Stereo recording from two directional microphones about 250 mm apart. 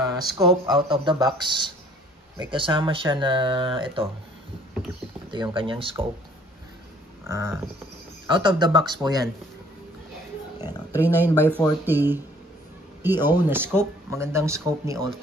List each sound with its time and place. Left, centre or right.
0.0 s a sound: centre
0.7 s speech: centre
5.3 s speech: centre
7.2 s speech: centre
11.0 s speech: centre